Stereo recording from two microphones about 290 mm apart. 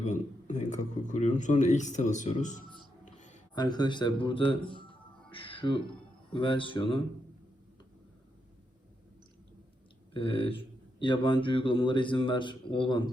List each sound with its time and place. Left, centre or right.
0.0 s speech: left
5.3 s music: centre
6.3 s speech: centre
10.1 s speech: centre